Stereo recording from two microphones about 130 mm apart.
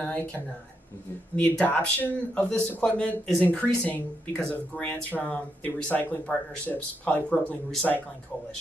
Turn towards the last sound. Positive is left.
turn(degrees=5)  # may be behind; listen again after turning